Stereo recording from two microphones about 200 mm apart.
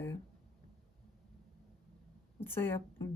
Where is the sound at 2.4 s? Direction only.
10° left (ahead or behind).